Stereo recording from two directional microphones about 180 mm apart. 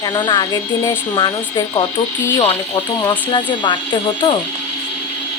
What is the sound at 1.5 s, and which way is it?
Speech, 25° left (ahead or behind).